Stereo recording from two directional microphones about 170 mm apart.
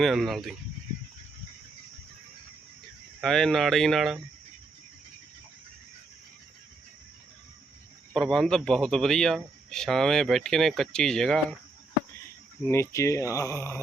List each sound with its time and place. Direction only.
0.0 s a man's voice: centre (ahead or behind)
3.2 s a man's voice: centre (ahead or behind)
8.1 s a man's voice: 5° left (ahead or behind)
12.6 s speech: 15° left (ahead or behind)